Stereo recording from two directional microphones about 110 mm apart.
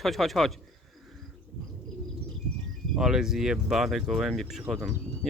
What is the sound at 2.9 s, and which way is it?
Speech, 5° right (ahead or behind).